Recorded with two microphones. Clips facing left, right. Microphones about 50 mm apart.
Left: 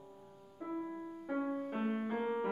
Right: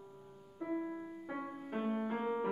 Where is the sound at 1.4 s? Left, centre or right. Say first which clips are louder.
Left 4 dB; centre.